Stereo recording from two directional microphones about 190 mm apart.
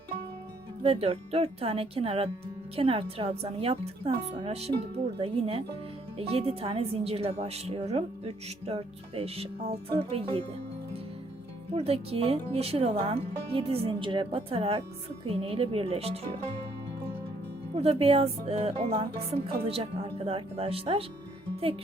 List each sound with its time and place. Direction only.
0.8 s a woman's voice: 30° right (ahead or behind)
11.7 s a woman's voice: 30° right (ahead or behind)
17.7 s a woman's voice: 30° right (ahead or behind)